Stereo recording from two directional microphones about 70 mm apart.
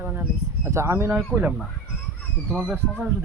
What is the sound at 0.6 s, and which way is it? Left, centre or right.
Speech, right.